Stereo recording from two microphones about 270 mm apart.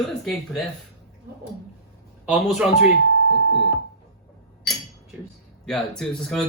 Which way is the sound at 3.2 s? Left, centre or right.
Left.